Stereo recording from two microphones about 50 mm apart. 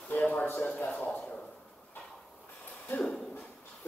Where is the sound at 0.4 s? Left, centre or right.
Left.